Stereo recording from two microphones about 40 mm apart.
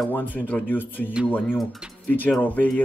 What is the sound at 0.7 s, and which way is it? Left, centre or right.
Speech, left.